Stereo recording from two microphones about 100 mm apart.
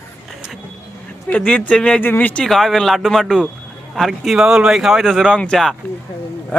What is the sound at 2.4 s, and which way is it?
Speech, 5° left (ahead or behind).